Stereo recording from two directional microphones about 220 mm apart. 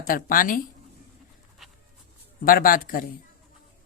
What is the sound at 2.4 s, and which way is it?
Speech, 40° left (ahead or behind).